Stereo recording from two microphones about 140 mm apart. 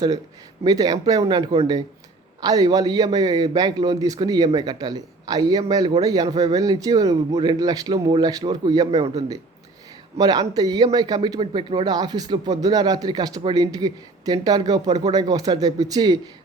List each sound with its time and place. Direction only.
0.6 s speech: 30° right (ahead or behind)